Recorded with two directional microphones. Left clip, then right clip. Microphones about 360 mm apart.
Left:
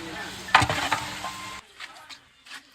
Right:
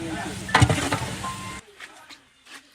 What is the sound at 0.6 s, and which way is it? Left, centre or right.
Stir, left.